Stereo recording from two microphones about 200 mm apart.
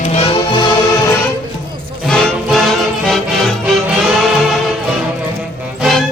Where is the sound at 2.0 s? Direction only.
Centre (ahead or behind).